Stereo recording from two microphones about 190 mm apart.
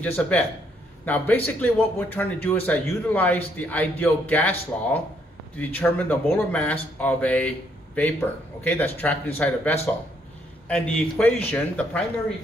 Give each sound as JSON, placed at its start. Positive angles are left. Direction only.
{"t": 0.0, "sound": "speech", "side_deg": 10}